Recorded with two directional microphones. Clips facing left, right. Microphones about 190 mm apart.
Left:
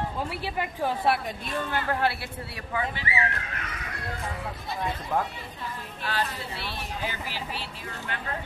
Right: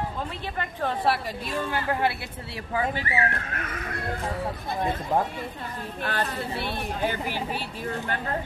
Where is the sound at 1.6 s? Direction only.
10° right (ahead or behind).